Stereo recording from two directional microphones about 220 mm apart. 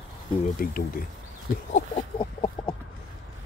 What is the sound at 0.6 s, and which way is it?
Speech, 40° left (ahead or behind).